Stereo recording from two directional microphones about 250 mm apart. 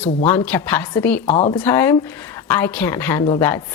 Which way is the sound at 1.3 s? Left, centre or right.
Left.